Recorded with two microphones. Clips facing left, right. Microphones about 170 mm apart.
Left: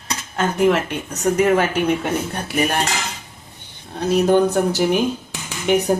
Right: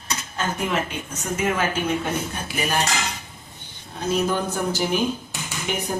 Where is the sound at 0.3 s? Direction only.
65° left (ahead or behind).